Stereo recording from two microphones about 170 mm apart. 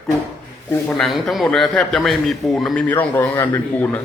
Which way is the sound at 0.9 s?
Centre (ahead or behind).